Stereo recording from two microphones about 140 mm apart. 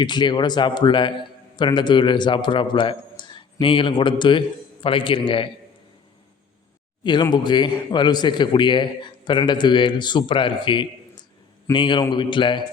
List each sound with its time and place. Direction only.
0.0 s a man's voice: 30° left (ahead or behind)
7.0 s a man's voice: 35° left (ahead or behind)